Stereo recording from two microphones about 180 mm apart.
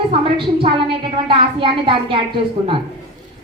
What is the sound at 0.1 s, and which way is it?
A woman's voice, 30° right (ahead or behind).